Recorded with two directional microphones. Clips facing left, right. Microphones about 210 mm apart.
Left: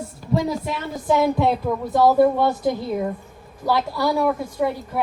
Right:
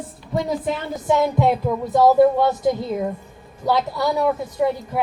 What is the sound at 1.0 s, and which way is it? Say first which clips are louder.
Speech: even; 20° right (ahead or behind).